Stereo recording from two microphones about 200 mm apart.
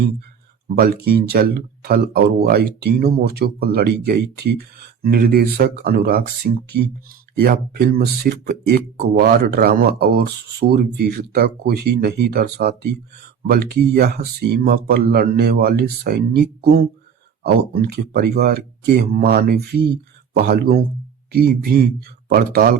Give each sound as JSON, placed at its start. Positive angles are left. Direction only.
{"t": 0.8, "sound": "speech", "side_deg": -50}